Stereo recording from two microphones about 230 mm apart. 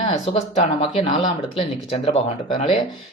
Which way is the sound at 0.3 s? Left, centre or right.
Left.